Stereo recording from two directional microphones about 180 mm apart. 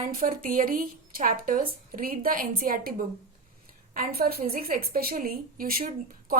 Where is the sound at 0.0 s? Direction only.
50° right (ahead or behind).